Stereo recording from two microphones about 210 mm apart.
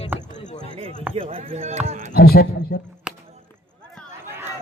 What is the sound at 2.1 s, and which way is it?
Speech, 45° left (ahead or behind).